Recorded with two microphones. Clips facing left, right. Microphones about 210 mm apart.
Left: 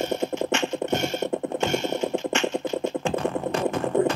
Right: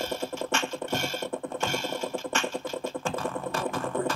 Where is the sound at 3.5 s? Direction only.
20° left (ahead or behind).